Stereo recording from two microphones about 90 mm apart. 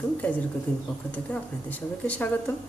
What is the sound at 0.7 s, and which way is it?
A woman's voice, 15° left (ahead or behind).